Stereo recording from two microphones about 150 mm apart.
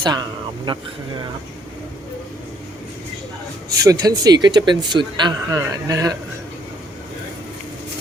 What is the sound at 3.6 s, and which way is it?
Speech, 25° right (ahead or behind).